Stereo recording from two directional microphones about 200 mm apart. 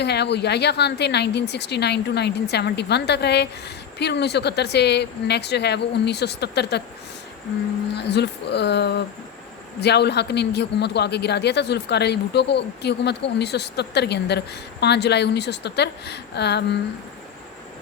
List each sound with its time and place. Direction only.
0.0 s a man's voice: 55° left (ahead or behind)
7.9 s a man's voice: 55° left (ahead or behind)